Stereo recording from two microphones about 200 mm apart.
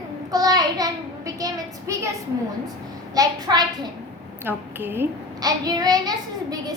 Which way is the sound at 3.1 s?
20° right (ahead or behind).